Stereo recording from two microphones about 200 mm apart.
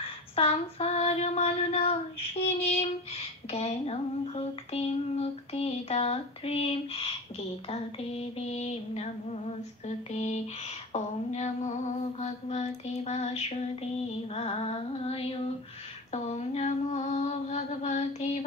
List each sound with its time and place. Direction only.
0.4 s child singing: 30° left (ahead or behind)
8.4 s child singing: 30° left (ahead or behind)
14.3 s a sound: 30° left (ahead or behind)
16.1 s child singing: 35° left (ahead or behind)